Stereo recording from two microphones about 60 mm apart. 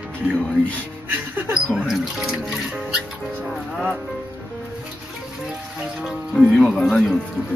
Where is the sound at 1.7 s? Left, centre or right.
Centre.